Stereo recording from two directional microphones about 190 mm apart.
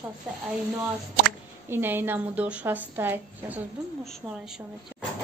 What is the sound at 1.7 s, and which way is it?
A woman's voice, 10° right (ahead or behind).